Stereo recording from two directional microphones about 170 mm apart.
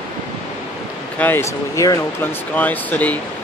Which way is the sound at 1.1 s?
10° left (ahead or behind).